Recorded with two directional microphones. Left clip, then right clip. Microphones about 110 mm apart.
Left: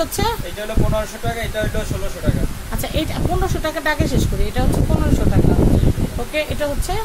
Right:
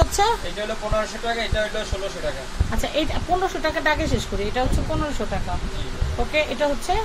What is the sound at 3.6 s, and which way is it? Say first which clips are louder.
Speech: left 4 dB; 35° left (ahead or behind).